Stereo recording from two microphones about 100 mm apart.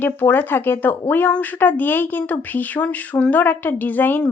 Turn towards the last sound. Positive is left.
turn(degrees=20)  # may be behind; listen again after turning